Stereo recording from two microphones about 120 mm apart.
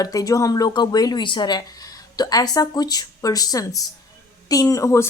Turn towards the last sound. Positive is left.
turn(degrees=25)  # may be behind; listen again after turning